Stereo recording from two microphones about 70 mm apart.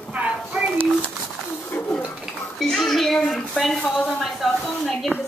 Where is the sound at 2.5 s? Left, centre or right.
Centre.